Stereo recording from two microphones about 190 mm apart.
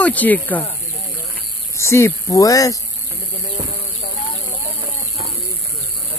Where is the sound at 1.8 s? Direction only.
15° left (ahead or behind).